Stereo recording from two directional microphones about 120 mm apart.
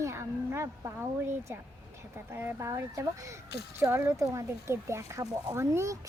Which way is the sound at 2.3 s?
20° right (ahead or behind).